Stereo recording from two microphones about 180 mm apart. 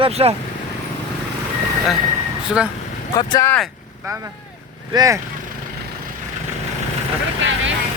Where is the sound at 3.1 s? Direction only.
20° left (ahead or behind).